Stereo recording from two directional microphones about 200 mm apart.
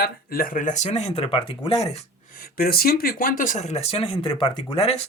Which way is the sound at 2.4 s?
50° left (ahead or behind).